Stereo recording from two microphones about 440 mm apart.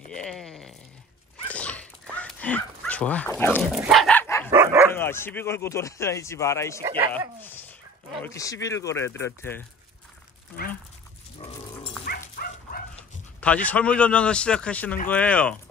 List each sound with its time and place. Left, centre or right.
0.1 s a sound: centre
1.5 s dog: centre
4.5 s dog: centre
4.9 s a man's voice: centre
8.2 s a man's voice: centre
10.5 s speech: centre
12.0 s dog: centre
13.4 s speech: centre